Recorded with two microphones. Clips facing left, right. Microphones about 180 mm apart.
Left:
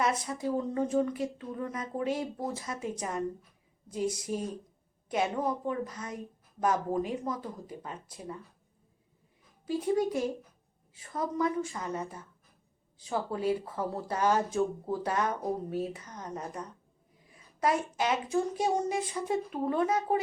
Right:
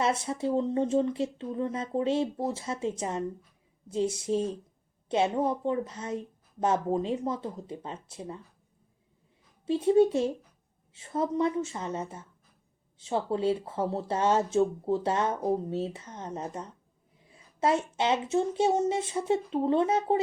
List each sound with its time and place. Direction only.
0.0 s speech: 25° right (ahead or behind)
9.6 s speech: 25° right (ahead or behind)